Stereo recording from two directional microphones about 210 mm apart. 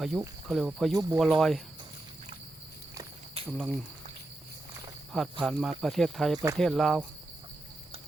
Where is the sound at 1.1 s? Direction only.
Centre (ahead or behind).